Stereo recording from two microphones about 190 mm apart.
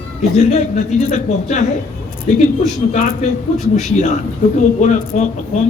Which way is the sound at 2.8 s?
35° left (ahead or behind).